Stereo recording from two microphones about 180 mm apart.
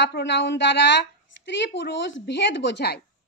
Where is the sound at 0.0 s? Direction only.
80° left.